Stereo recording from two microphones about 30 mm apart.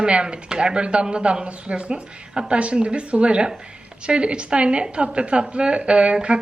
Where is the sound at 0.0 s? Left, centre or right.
Right.